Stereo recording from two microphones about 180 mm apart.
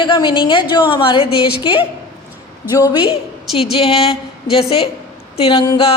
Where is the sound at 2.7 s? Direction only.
25° left (ahead or behind).